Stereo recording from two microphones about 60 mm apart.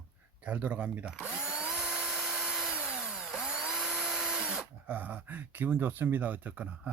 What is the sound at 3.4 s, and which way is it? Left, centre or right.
Drill, centre.